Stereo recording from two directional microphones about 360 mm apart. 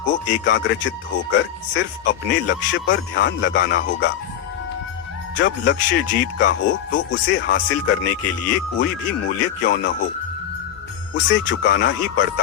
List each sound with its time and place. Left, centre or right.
0.0 s speech: left
5.4 s speech: left
9.0 s speech: left
11.1 s speech: left